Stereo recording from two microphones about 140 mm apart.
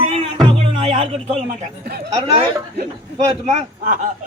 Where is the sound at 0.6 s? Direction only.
45° right (ahead or behind).